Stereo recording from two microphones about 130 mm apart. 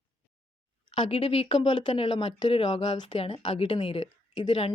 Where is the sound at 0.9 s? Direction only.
45° left (ahead or behind).